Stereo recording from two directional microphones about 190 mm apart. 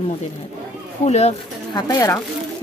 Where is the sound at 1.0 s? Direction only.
35° left (ahead or behind).